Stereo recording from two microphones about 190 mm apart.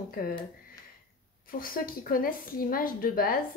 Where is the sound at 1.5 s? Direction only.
50° left (ahead or behind).